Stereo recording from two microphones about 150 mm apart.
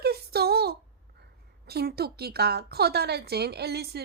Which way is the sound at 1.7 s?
90° right.